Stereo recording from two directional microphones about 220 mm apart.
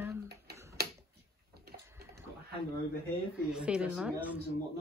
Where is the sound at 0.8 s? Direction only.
45° right (ahead or behind).